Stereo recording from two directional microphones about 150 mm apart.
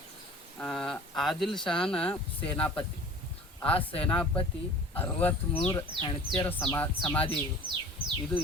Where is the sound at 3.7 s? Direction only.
40° left (ahead or behind).